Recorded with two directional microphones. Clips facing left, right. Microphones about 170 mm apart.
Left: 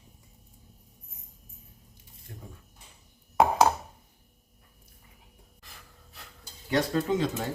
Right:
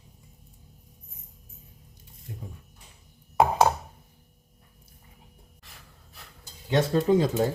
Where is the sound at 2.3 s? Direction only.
15° right (ahead or behind).